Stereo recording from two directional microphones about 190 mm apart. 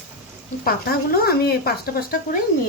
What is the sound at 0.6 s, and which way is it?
Speech, 50° left (ahead or behind).